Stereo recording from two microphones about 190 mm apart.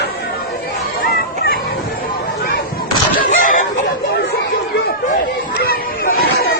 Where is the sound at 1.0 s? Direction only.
50° left (ahead or behind).